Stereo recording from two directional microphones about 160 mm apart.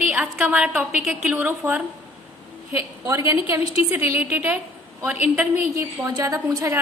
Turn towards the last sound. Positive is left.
turn(degrees=-20)  # may be behind; listen again after turning